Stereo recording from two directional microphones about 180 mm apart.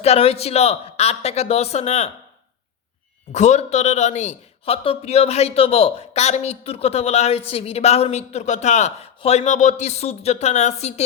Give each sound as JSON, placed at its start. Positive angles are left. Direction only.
{"t": 0.0, "sound": "a man's voice", "side_deg": 35}
{"t": 3.3, "sound": "a man's voice", "side_deg": 40}